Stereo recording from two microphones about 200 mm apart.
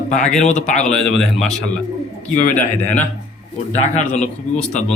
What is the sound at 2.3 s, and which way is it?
Speech, 40° left (ahead or behind).